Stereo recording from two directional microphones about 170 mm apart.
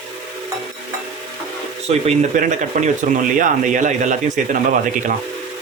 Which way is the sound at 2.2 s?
45° right (ahead or behind).